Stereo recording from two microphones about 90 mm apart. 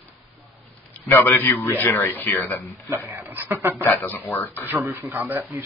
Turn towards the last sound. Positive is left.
turn(degrees=-20)  # may be behind; listen again after turning